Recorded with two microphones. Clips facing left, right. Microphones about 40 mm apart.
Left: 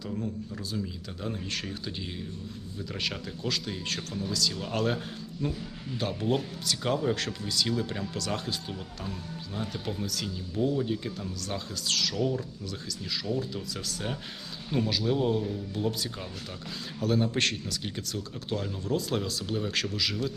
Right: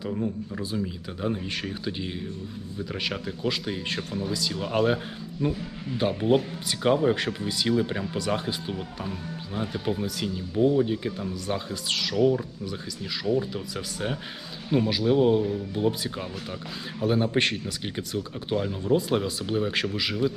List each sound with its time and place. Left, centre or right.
0.0 s speech: right